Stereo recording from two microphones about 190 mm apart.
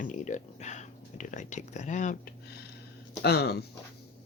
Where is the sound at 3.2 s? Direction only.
60° left (ahead or behind).